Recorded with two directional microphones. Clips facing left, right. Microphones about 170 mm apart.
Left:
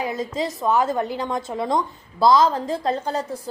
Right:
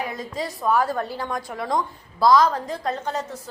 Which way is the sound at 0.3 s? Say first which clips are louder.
Left 1 dB; 20° left (ahead or behind).